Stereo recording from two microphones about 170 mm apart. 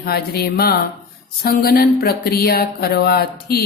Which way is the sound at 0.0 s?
65° left (ahead or behind).